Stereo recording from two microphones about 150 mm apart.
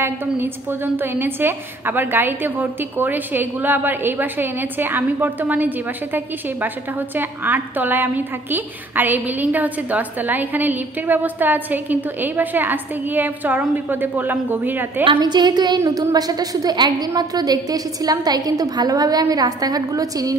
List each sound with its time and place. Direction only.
0.0 s a woman's voice: 15° right (ahead or behind)
15.0 s a woman's voice: 30° right (ahead or behind)